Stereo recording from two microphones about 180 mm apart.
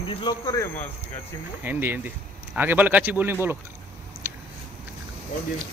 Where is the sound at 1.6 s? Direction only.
10° right (ahead or behind).